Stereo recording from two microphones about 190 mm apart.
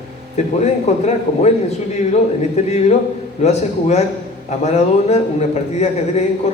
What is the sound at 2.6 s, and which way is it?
A man's voice, 35° left (ahead or behind).